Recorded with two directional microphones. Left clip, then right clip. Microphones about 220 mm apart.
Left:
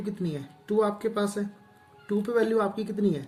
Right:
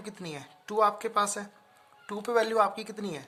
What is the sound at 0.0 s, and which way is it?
Speech, 45° right (ahead or behind).